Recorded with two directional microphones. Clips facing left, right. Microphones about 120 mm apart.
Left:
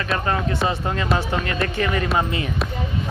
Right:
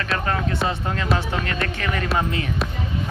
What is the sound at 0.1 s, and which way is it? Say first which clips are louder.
Speech: left 2 dB; centre (ahead or behind).